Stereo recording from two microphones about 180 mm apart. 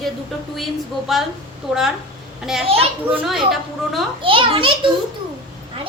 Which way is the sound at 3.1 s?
Centre (ahead or behind).